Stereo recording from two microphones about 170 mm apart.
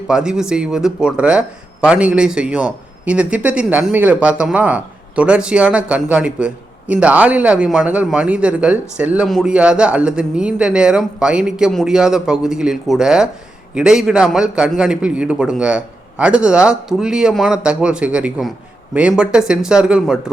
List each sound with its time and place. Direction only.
0.1 s a man's voice: 5° right (ahead or behind)